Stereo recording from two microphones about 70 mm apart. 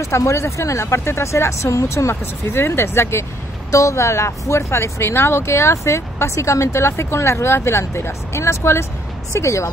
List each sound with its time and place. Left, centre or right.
0.0 s speech: left